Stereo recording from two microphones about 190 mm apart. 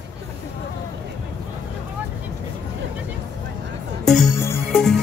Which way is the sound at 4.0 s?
Centre (ahead or behind).